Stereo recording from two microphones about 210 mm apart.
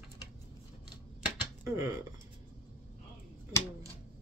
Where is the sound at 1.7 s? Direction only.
15° right (ahead or behind).